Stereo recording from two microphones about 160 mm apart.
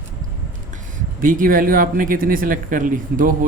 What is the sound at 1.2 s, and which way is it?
Speech, 60° right (ahead or behind).